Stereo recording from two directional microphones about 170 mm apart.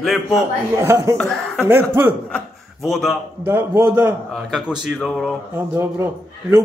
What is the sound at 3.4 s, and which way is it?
A man's voice, 15° right (ahead or behind).